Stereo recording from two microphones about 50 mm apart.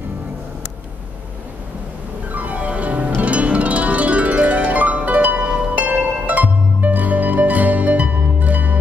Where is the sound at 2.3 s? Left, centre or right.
Right.